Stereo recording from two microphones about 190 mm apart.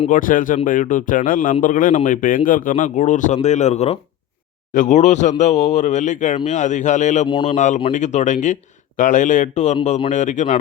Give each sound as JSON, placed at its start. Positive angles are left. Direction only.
{"t": 0.0, "sound": "speech", "side_deg": 45}
{"t": 7.3, "sound": "speech", "side_deg": 25}
{"t": 7.5, "sound": "speech", "side_deg": 40}